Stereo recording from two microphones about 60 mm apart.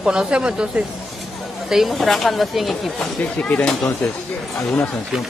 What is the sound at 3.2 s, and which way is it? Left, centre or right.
Speech, left.